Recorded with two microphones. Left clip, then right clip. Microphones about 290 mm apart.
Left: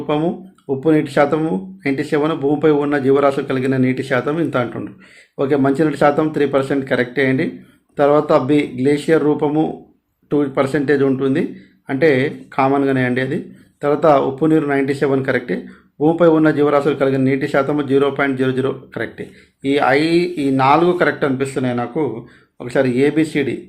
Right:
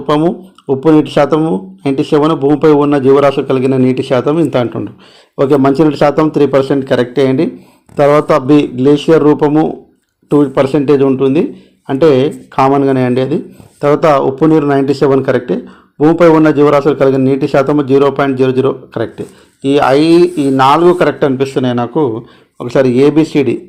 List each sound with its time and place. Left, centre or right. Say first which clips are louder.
0.7 s a man's voice: right 7 dB; right
1.9 s speech: right 7 dB; centre
2.1 s a man's voice: right 8 dB; right
8.4 s speech: right 7 dB; centre
8.9 s a man's voice: right 7 dB; right
20.3 s speech: right 7 dB; centre
20.7 s a man's voice: right 5 dB; centre